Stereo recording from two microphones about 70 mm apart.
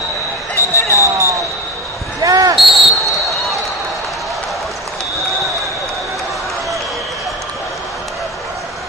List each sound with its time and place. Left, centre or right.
0.6 s a sound: left
0.9 s basketball bounce: right
2.2 s basketball bounce: right
2.6 s basketball bounce: centre